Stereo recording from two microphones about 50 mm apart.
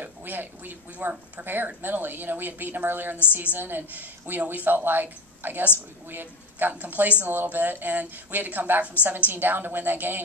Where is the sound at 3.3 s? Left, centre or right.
Right.